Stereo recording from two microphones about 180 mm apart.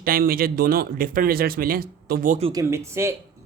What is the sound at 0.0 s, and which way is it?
Speech, 55° right (ahead or behind).